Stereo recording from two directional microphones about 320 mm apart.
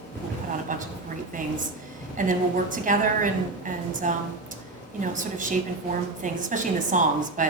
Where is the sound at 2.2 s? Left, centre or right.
Right.